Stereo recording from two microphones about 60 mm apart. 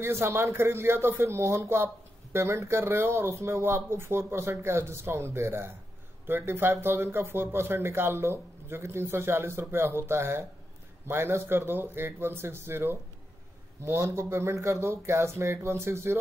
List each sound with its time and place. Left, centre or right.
0.0 s speech: right
13.8 s speech: right